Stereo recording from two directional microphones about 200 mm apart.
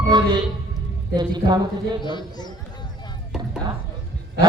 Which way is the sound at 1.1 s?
20° right (ahead or behind).